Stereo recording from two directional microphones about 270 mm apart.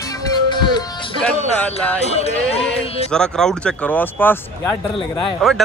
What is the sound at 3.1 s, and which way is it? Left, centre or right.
Speech, centre.